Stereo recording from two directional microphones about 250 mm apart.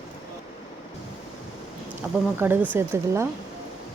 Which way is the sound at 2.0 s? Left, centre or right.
Centre.